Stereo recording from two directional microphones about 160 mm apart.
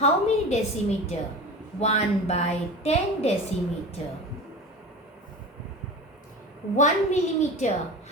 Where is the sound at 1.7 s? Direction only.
40° left (ahead or behind).